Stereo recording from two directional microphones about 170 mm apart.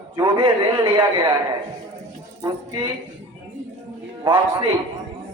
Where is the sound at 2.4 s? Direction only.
25° right (ahead or behind).